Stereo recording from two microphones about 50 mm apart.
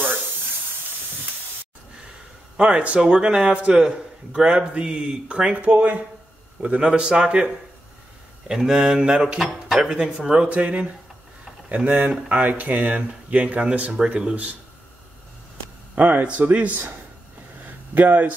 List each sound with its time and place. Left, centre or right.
2.5 s a man's voice: centre
10.5 s a man's voice: right
15.9 s speech: right
16.3 s a man's voice: right
17.6 s a sound: right